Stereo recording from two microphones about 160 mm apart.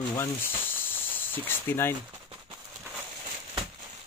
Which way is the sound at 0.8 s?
10° left (ahead or behind).